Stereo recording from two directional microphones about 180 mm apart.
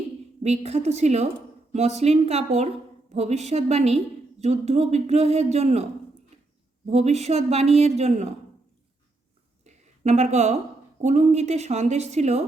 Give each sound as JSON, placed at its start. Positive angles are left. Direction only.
{"t": 0.4, "sound": "speech", "side_deg": -35}
{"t": 6.8, "sound": "speech", "side_deg": -35}
{"t": 9.6, "sound": "a sound", "side_deg": -40}
{"t": 11.0, "sound": "speech", "side_deg": -40}